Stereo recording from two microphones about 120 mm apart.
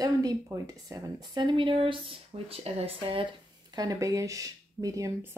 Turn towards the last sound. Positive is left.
turn(degrees=-20)  # may be behind; listen again after turning